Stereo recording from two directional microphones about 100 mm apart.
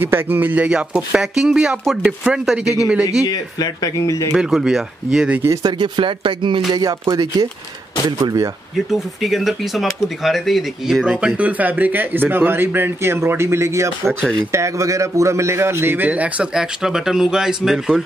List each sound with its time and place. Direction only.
0.0 s speech: 20° right (ahead or behind)
3.3 s speech: 40° left (ahead or behind)
4.4 s speech: 5° right (ahead or behind)
5.6 s speech: 45° right (ahead or behind)
6.7 s music: 40° right (ahead or behind)
8.7 s a man's voice: centre (ahead or behind)